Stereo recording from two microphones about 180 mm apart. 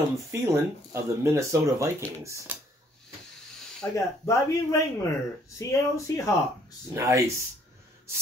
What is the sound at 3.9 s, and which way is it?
Speech, 15° left (ahead or behind).